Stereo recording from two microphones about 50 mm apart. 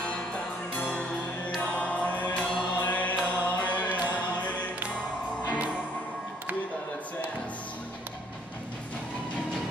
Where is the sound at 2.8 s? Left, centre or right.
Left.